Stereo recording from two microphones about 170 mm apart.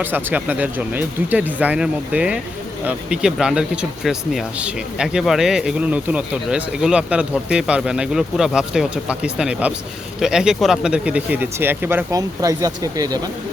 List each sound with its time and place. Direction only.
0.0 s speech: 10° right (ahead or behind)